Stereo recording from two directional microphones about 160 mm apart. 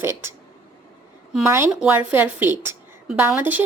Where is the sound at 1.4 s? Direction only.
15° right (ahead or behind).